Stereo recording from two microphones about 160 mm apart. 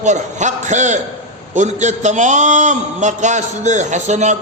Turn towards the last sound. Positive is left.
turn(degrees=-45)  # may be behind; listen again after turning